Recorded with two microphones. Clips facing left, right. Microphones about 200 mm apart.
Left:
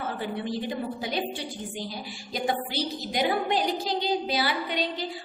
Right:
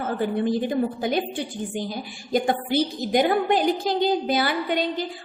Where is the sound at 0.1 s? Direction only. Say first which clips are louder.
Right 12 dB; 50° right (ahead or behind).